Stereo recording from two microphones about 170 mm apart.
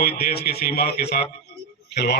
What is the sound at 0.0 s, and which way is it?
A man's voice, 65° left (ahead or behind).